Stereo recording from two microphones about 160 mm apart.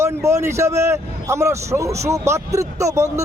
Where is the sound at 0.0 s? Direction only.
15° right (ahead or behind).